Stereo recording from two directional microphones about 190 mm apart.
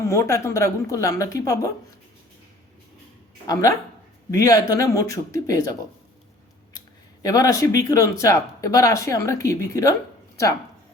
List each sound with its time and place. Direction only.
0.0 s speech: 15° left (ahead or behind)
3.4 s speech: 20° left (ahead or behind)
6.7 s a sound: 20° left (ahead or behind)
7.8 s speech: 15° left (ahead or behind)